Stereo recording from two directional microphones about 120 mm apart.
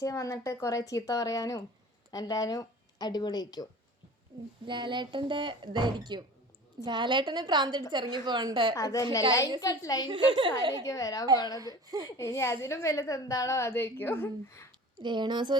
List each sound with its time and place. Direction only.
0.0 s a woman's voice: 25° left (ahead or behind)
4.6 s a woman's voice: 40° right (ahead or behind)
8.7 s a woman's voice: 30° left (ahead or behind)
10.1 s a woman's voice: 40° right (ahead or behind)
10.8 s a woman's voice: 25° left (ahead or behind)
15.0 s a woman's voice: 40° right (ahead or behind)